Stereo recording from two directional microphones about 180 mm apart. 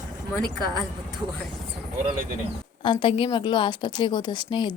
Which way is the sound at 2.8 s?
25° left (ahead or behind).